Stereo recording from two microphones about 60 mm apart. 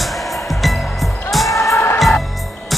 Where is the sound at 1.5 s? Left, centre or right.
Left.